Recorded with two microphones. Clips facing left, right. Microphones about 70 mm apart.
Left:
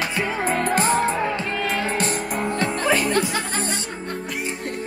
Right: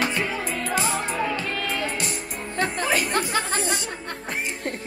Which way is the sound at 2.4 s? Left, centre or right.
Left.